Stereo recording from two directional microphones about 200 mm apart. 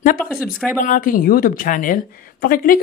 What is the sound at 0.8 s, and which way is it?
Speech, 40° left (ahead or behind).